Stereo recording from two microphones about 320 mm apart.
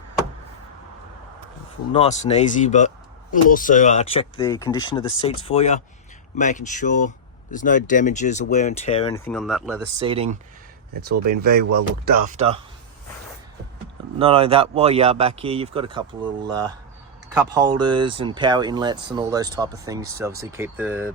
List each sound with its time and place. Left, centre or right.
1.9 s speech: left
9.1 s speech: centre
10.0 s speech: centre
11.1 s speech: right
11.5 s speech: right
14.2 s speech: centre